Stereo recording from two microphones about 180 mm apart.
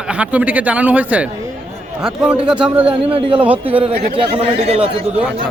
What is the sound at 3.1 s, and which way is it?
Speech, 30° right (ahead or behind).